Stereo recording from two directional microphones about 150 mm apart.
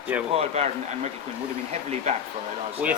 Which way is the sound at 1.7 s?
50° right (ahead or behind).